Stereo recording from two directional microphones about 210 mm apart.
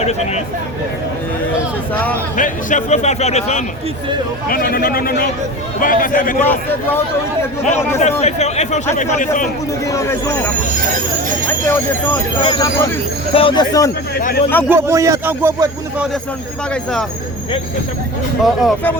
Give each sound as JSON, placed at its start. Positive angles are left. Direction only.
{"t": 0.0, "sound": "speech", "side_deg": 30}
{"t": 1.9, "sound": "speech", "side_deg": 5}
{"t": 2.3, "sound": "speech", "side_deg": 40}
{"t": 4.4, "sound": "a man's voice", "side_deg": 45}
{"t": 6.4, "sound": "speech", "side_deg": 10}
{"t": 7.6, "sound": "speech", "side_deg": 35}
{"t": 9.8, "sound": "speech", "side_deg": 15}
{"t": 12.4, "sound": "speech", "side_deg": 20}
{"t": 14.7, "sound": "speech", "side_deg": -15}
{"t": 18.4, "sound": "speech", "side_deg": 5}